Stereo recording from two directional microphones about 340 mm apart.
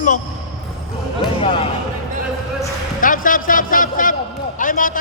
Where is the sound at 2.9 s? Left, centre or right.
Left.